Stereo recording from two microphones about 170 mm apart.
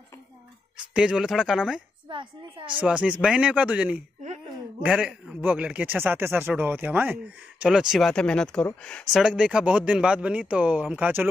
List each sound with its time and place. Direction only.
0.9 s speech: 5° right (ahead or behind)
2.0 s a woman's voice: 30° right (ahead or behind)
2.7 s speech: 5° right (ahead or behind)
9.1 s speech: 5° right (ahead or behind)